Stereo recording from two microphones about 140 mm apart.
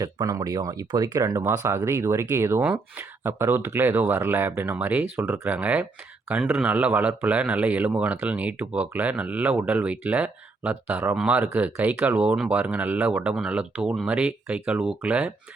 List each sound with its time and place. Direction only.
0.0 s speech: 30° right (ahead or behind); by 15.3 s 10° right (ahead or behind)